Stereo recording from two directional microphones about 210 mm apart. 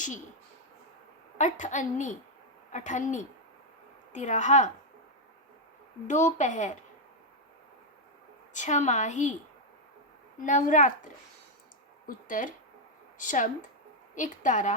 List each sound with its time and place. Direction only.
1.4 s a woman's voice: 35° left (ahead or behind)
6.1 s a woman's voice: 35° left (ahead or behind)
8.5 s a woman's voice: 35° left (ahead or behind)
10.4 s a woman's voice: 35° left (ahead or behind)
12.0 s a woman's voice: 40° left (ahead or behind)